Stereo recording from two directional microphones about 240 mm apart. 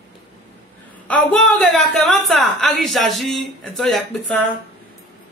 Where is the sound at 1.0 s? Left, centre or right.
Centre.